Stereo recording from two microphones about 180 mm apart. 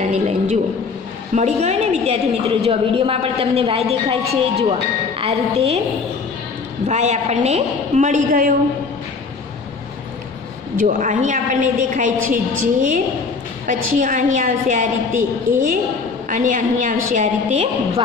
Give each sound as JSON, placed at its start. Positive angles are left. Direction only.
{"t": 0.0, "sound": "a sound", "side_deg": -40}
{"t": 1.3, "sound": "a woman's voice", "side_deg": -40}
{"t": 6.9, "sound": "a woman's voice", "side_deg": -40}
{"t": 10.8, "sound": "a woman's voice", "side_deg": -45}
{"t": 16.3, "sound": "a woman's voice", "side_deg": -45}